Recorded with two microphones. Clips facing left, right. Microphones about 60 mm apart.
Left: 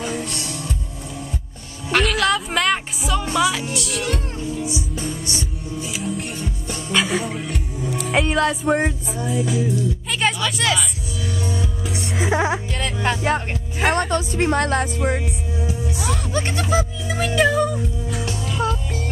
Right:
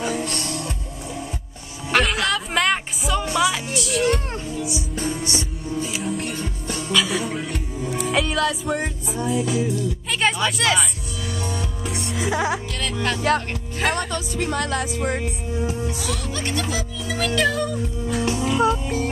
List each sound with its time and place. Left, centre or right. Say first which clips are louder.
0.1 s music: right 1 dB; right
1.9 s music: left 2 dB; centre
3.7 s speech: right 4 dB; centre
4.9 s music: right 2 dB; centre
8.4 s music: left 4 dB; left
9.1 s speech: even; centre
11.4 s music: left 2 dB; centre
12.3 s speech: left 2 dB; left
13.9 s speech: left 5 dB; left
16.0 s speech: left 4 dB; left
18.2 s music: right 5 dB; right